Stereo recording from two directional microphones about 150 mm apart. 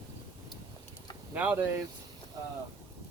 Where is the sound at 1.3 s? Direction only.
10° right (ahead or behind).